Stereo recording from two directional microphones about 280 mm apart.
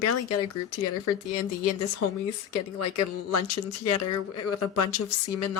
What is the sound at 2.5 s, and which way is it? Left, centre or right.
A woman's voice, left.